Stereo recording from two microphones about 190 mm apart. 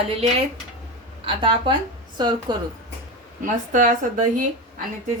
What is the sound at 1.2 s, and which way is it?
A woman's voice, 25° right (ahead or behind).